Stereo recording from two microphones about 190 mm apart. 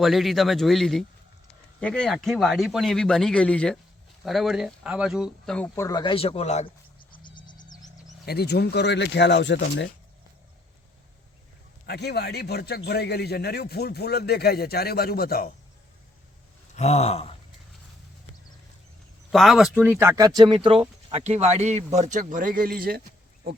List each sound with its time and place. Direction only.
0.0 s speech: centre (ahead or behind); by 7.3 s 35° left (ahead or behind)
7.3 s a sound: 25° left (ahead or behind)
8.2 s a man's voice: 60° left (ahead or behind)
11.9 s a man's voice: 60° left (ahead or behind)
16.7 s speech: 35° left (ahead or behind)
19.3 s speech: centre (ahead or behind); by 23.0 s 50° right (ahead or behind)